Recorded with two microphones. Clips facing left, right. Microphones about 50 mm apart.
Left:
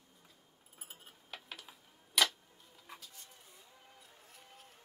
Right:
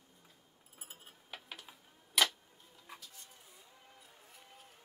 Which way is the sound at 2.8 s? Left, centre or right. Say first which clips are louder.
Even; centre.